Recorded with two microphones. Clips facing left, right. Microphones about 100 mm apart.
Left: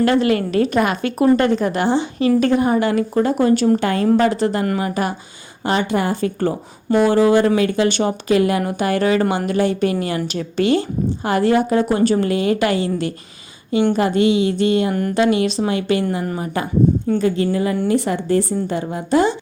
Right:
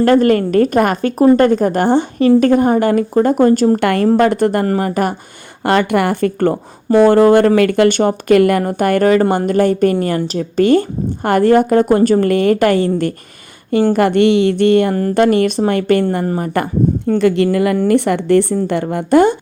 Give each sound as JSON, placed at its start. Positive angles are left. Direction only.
{"t": 0.0, "sound": "a woman's voice", "side_deg": -45}
{"t": 3.8, "sound": "a woman's voice", "side_deg": -60}
{"t": 4.6, "sound": "speech", "side_deg": -35}
{"t": 5.6, "sound": "a woman's voice", "side_deg": -65}
{"t": 13.9, "sound": "a woman's voice", "side_deg": -65}